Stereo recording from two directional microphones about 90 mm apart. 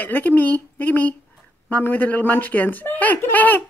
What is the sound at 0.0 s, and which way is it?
A woman's voice, 20° left (ahead or behind).